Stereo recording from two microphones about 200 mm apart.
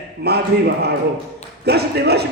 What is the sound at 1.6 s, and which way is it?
Speech, 55° right (ahead or behind).